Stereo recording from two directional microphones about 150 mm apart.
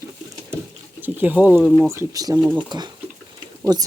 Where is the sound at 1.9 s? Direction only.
20° right (ahead or behind).